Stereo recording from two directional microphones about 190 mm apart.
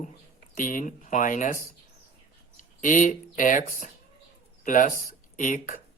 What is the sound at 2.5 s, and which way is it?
Speech, 45° left (ahead or behind).